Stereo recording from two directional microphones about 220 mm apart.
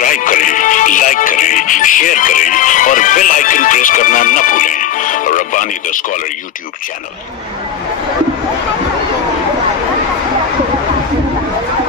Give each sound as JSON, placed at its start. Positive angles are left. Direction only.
{"t": 0.0, "sound": "music", "side_deg": 35}